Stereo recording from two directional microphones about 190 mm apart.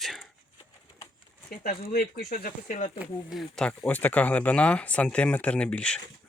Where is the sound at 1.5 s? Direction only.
55° left (ahead or behind).